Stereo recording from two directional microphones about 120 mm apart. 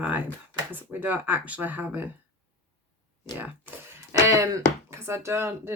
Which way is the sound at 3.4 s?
15° right (ahead or behind).